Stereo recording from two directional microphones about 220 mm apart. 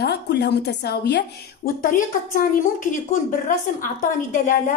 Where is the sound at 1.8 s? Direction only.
35° left (ahead or behind).